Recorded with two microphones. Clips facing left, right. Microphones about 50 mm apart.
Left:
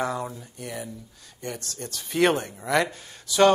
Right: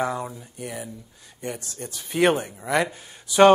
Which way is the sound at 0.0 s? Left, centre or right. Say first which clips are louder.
Right 2 dB; centre.